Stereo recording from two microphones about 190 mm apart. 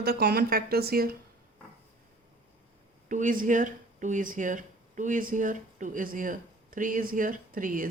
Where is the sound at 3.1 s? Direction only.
45° right (ahead or behind).